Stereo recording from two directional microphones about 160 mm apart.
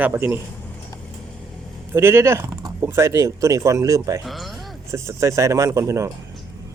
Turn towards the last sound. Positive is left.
turn(degrees=-20)  # may be behind; listen again after turning